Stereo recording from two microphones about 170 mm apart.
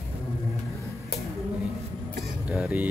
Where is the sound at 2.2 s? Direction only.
5° right (ahead or behind).